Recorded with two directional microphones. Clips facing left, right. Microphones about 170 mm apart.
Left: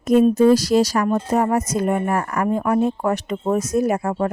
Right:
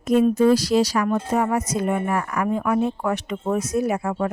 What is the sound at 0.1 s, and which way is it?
Speech, 45° left (ahead or behind).